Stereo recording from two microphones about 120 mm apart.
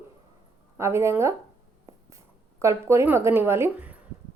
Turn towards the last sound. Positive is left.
turn(degrees=-15)  # may be behind; listen again after turning